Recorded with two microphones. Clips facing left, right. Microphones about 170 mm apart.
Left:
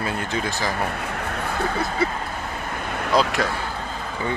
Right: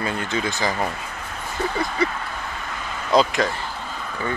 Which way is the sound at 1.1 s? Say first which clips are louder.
Left 6 dB; 65° left (ahead or behind).